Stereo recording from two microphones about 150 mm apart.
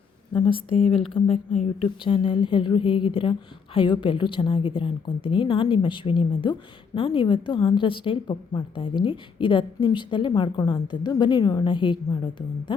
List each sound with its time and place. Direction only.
0.3 s a woman's voice: 35° left (ahead or behind)